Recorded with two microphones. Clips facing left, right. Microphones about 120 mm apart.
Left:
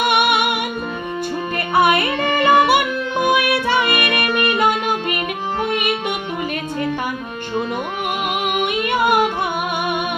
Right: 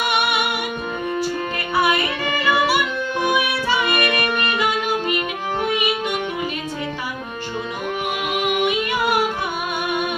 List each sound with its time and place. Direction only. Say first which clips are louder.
0.0 s music: left 4 dB; 55° left (ahead or behind)
1.7 s music: left 4 dB; 55° left (ahead or behind)
8.6 s music: left 2 dB; 55° left (ahead or behind)